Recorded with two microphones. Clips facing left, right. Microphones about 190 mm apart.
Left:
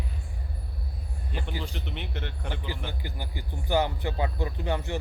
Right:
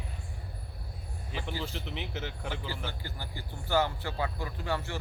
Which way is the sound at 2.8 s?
15° left (ahead or behind).